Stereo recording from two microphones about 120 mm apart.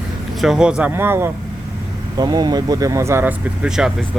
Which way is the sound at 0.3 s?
5° right (ahead or behind).